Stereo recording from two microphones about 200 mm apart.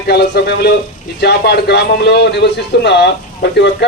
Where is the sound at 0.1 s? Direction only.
55° left (ahead or behind).